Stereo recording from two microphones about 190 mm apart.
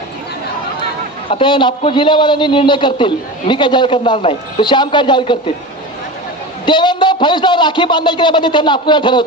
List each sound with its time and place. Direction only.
1.3 s a man's voice: 25° left (ahead or behind)
6.7 s a man's voice: 25° left (ahead or behind)